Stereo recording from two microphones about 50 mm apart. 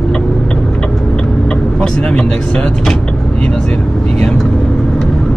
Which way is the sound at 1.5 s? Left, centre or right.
Centre.